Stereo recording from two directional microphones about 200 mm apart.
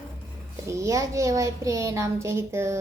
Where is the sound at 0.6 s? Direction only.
15° right (ahead or behind).